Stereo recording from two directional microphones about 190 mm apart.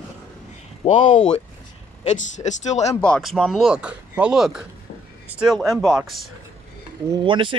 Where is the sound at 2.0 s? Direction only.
35° left (ahead or behind).